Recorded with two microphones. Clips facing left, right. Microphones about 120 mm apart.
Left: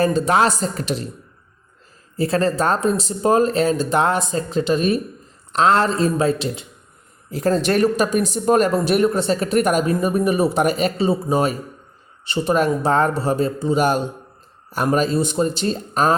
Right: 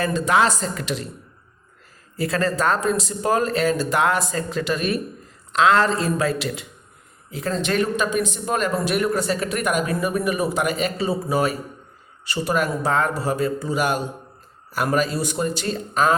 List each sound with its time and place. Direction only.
0.0 s speech: 35° left (ahead or behind)
2.1 s speech: 30° left (ahead or behind)
7.3 s speech: 40° left (ahead or behind)
9.9 s speech: 25° left (ahead or behind)